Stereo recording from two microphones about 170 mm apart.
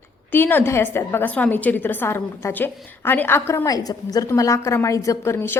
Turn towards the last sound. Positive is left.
turn(degrees=15)  # may be behind; listen again after turning